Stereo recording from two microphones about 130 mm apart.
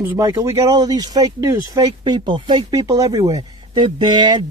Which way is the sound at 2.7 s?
25° right (ahead or behind).